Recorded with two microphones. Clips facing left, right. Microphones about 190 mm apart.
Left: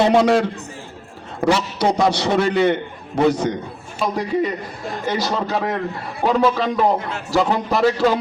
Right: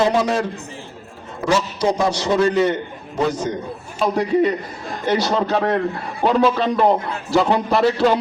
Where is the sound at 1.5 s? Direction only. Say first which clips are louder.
Even; 65° left (ahead or behind).